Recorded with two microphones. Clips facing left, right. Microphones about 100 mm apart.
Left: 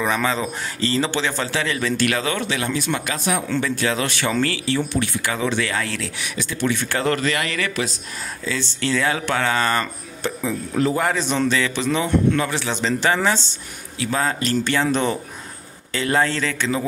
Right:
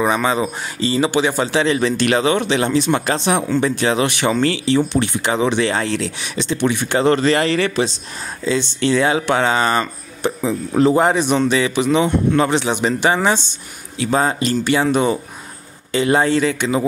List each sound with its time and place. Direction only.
0.0 s speech: 20° right (ahead or behind)